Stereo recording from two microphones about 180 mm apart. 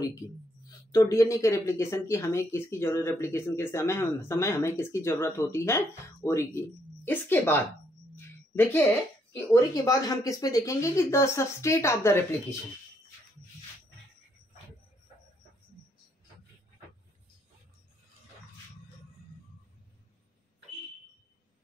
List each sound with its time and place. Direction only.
0.7 s speech: 20° left (ahead or behind)
9.3 s speech: 15° left (ahead or behind)